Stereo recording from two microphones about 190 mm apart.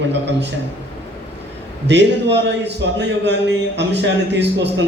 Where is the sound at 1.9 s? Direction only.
65° right (ahead or behind).